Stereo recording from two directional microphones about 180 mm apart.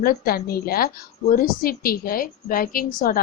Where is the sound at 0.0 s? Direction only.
55° left (ahead or behind).